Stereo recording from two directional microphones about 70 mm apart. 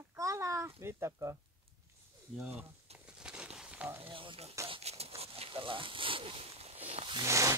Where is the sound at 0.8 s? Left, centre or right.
Right.